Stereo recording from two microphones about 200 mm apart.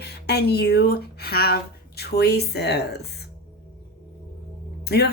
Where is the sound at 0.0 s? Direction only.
55° left (ahead or behind).